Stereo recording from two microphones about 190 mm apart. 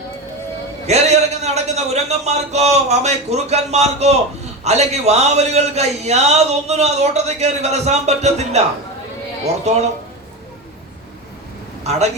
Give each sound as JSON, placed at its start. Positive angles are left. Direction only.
{"t": 0.9, "sound": "a man's voice", "side_deg": -35}
{"t": 11.8, "sound": "a man's voice", "side_deg": -35}